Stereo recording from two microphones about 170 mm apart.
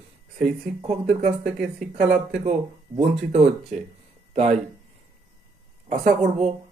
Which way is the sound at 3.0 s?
40° right (ahead or behind).